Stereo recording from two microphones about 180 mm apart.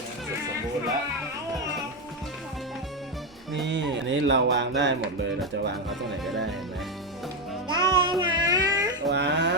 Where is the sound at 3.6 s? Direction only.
85° right.